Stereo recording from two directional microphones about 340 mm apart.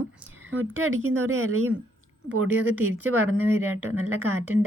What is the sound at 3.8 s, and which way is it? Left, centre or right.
Speech, right.